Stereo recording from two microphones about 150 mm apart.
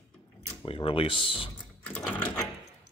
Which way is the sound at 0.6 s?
40° left (ahead or behind).